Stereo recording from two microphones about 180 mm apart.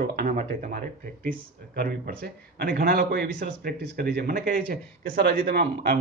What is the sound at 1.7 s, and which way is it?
A man's voice, 65° right (ahead or behind).